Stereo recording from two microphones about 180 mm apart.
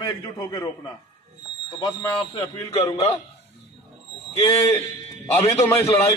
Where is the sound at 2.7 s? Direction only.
35° left (ahead or behind).